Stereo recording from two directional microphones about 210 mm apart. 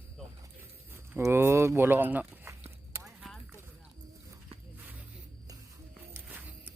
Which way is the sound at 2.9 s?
15° right (ahead or behind).